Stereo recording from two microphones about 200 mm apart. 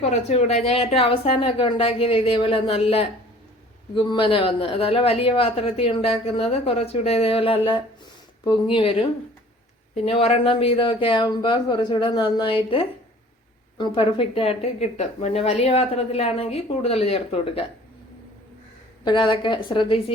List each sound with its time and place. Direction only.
0.0 s speech: 30° left (ahead or behind)
10.1 s speech: 30° left (ahead or behind)
13.7 s speech: 25° left (ahead or behind)
19.0 s speech: 25° left (ahead or behind)